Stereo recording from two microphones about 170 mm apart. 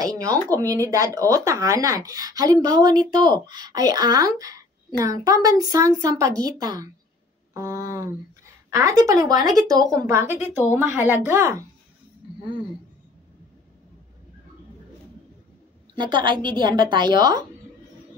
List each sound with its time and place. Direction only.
0.0 s speech: 20° right (ahead or behind)
16.0 s speech: 25° right (ahead or behind)